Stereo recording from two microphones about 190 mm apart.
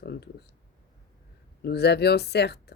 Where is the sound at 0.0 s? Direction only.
60° left (ahead or behind).